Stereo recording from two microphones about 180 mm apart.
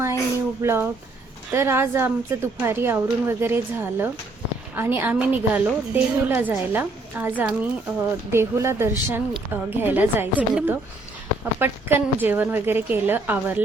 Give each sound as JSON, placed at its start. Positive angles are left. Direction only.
{"t": 0.6, "sound": "a woman's voice", "side_deg": -15}